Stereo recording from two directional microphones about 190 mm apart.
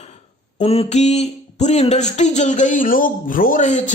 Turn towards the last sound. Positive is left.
turn(degrees=40)  # may be behind; listen again after turning